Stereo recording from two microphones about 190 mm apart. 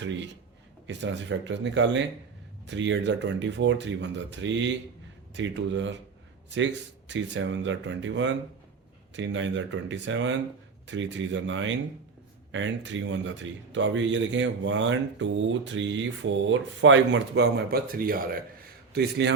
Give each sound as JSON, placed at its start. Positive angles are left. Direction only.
{"t": 0.9, "sound": "a man's voice", "side_deg": -75}
{"t": 7.1, "sound": "a man's voice", "side_deg": -75}
{"t": 18.9, "sound": "a man's voice", "side_deg": -65}